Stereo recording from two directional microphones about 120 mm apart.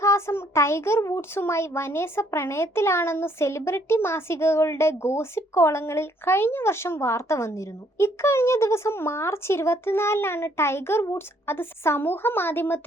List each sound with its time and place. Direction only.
0.0 s a child's voice: 25° left (ahead or behind)